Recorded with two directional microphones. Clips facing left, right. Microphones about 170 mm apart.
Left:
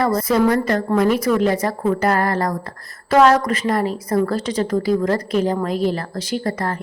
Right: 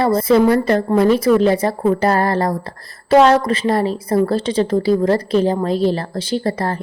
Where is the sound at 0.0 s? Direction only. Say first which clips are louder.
Right 4 dB; 30° right (ahead or behind).